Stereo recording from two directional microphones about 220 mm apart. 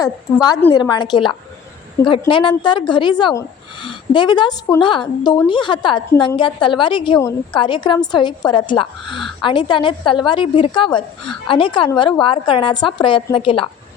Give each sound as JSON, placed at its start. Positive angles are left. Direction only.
{"t": 0.0, "sound": "a woman's voice", "side_deg": 15}
{"t": 9.0, "sound": "speech", "side_deg": 0}
{"t": 9.4, "sound": "a woman's voice", "side_deg": 20}